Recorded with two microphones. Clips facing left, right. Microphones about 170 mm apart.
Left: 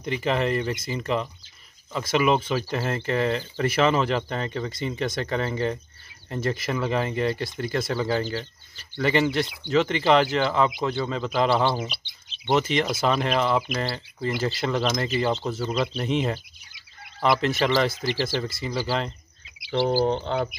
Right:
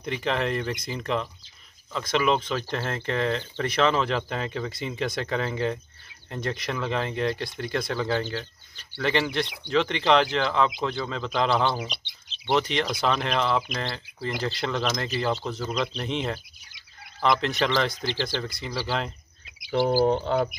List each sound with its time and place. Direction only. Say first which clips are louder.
0.0 s speech: left 2 dB; centre (ahead or behind)